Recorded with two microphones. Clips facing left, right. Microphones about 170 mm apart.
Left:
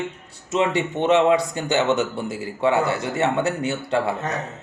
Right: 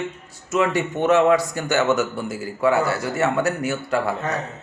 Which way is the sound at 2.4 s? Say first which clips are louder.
Right 1 dB; 25° left (ahead or behind).